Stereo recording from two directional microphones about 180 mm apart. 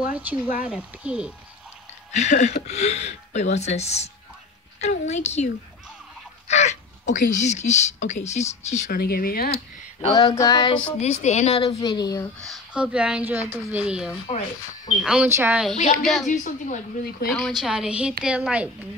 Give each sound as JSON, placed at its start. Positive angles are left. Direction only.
{"t": 0.0, "sound": "speech", "side_deg": -10}
{"t": 2.1, "sound": "speech", "side_deg": 40}
{"t": 5.1, "sound": "speech", "side_deg": 40}
{"t": 10.1, "sound": "female singing", "side_deg": 20}
{"t": 11.0, "sound": "speech", "side_deg": 40}
{"t": 12.4, "sound": "speech", "side_deg": -5}
{"t": 16.3, "sound": "speech", "side_deg": 45}
{"t": 17.3, "sound": "speech", "side_deg": 0}